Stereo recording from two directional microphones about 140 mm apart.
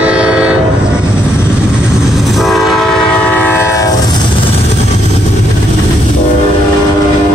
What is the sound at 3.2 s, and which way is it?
Train, 10° left (ahead or behind).